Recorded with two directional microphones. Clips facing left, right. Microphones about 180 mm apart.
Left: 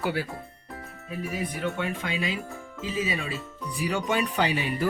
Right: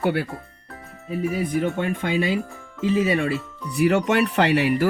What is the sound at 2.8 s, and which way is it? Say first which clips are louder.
Speech: right 10 dB; 65° right (ahead or behind).